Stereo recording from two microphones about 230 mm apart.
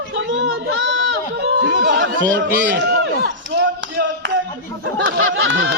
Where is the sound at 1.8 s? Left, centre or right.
Right.